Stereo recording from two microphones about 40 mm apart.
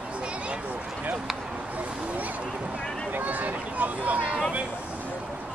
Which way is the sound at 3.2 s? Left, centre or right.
Right.